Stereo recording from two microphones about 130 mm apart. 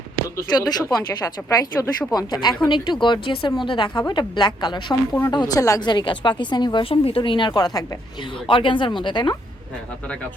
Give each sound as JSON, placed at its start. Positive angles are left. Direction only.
{"t": 0.3, "sound": "a woman's voice", "side_deg": 30}
{"t": 8.4, "sound": "a woman's voice", "side_deg": 40}